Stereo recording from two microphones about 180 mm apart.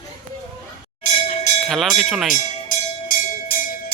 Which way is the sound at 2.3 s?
45° left (ahead or behind).